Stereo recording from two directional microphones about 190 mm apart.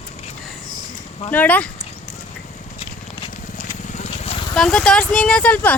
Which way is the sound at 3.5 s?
35° left (ahead or behind).